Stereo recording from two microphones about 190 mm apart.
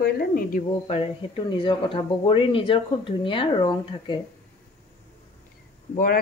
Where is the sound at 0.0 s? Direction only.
50° left (ahead or behind).